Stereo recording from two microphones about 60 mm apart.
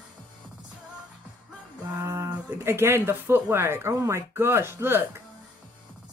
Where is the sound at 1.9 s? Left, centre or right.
Right.